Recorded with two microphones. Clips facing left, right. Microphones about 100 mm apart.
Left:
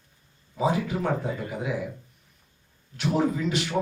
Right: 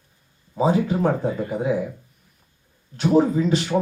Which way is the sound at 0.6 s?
30° right (ahead or behind).